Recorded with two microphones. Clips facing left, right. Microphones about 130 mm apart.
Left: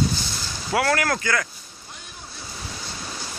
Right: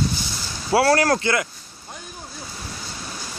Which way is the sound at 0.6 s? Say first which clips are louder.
Right 5 dB; 30° right (ahead or behind).